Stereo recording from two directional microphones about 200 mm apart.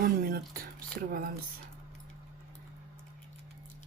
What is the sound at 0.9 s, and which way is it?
Speech, 45° right (ahead or behind).